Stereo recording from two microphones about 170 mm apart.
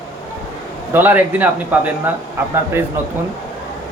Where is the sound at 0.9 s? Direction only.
10° right (ahead or behind).